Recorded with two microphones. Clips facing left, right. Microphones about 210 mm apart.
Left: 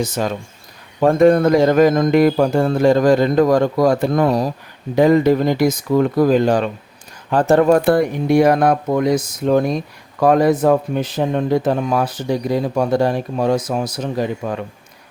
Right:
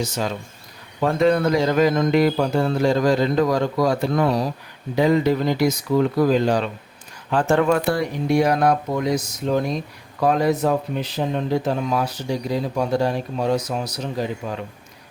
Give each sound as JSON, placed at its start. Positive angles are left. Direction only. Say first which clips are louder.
{"t": 0.0, "sound": "speech", "louder": "left 4 dB", "side_deg": 50}
{"t": 7.3, "sound": "speech", "louder": "left 5 dB", "side_deg": 40}
{"t": 7.9, "sound": "speech", "louder": "left 6 dB", "side_deg": 55}